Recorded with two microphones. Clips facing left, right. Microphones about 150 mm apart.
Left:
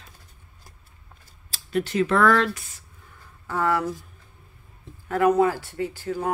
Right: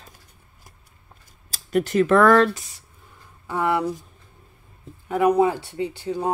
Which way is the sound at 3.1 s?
20° right (ahead or behind).